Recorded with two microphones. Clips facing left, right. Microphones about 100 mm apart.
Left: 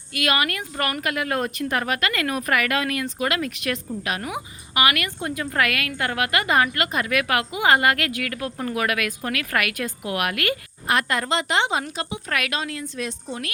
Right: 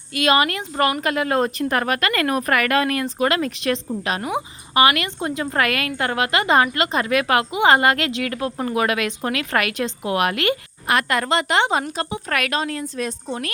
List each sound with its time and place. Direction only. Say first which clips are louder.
0.1 s speech: right 5 dB; 30° right (ahead or behind)
1.7 s speech: right 3 dB; 45° right (ahead or behind); by 10.6 s 25° right (ahead or behind)
10.8 s a woman's voice: right 3 dB; 70° right (ahead or behind); by 13.1 s 40° right (ahead or behind)